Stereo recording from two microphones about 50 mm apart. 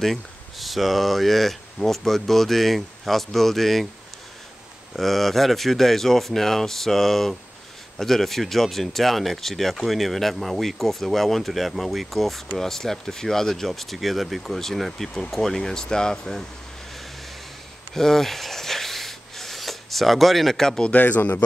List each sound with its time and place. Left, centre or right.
0.0 s speech: centre
4.9 s speech: centre
17.9 s rub: centre
20.9 s speech: left